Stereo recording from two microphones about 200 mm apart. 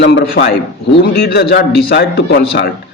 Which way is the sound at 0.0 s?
60° left (ahead or behind).